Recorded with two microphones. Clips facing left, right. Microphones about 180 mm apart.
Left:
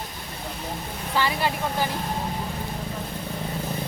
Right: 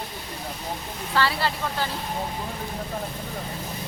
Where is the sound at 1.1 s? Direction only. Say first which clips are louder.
Even; 15° left (ahead or behind).